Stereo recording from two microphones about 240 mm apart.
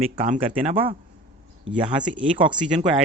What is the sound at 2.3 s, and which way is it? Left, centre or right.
Speech, right.